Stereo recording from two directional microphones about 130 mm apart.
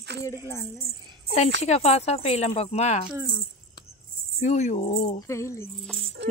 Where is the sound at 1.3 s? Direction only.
55° left (ahead or behind).